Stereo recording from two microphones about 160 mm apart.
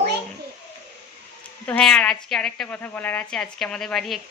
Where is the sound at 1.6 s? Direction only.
5° left (ahead or behind).